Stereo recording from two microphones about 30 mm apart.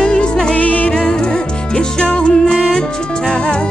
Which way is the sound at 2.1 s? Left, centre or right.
Left.